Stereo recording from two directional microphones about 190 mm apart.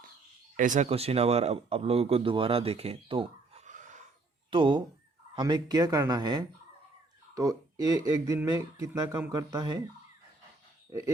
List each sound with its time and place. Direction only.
0.5 s speech: 40° right (ahead or behind)
4.5 s speech: 25° right (ahead or behind)